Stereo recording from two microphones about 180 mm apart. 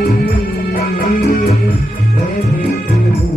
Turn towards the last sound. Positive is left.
turn(degrees=55)  # may be behind; listen again after turning